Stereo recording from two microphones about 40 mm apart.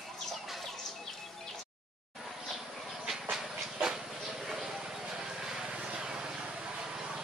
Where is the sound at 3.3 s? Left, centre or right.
Centre.